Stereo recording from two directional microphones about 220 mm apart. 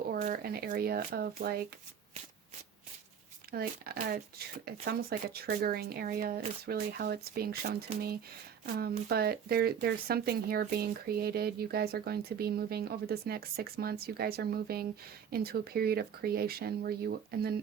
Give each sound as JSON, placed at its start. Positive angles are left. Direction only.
{"t": 0.1, "sound": "speech", "side_deg": -40}
{"t": 3.5, "sound": "speech", "side_deg": -45}